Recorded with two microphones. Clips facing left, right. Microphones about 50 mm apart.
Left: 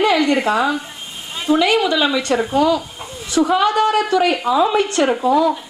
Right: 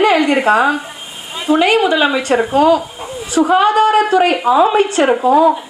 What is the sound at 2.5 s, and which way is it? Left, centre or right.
Speech, right.